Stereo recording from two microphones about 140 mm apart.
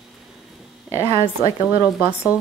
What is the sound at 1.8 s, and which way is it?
Speech, 10° right (ahead or behind).